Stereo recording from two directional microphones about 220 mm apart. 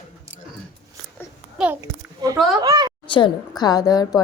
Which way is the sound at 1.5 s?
5° right (ahead or behind).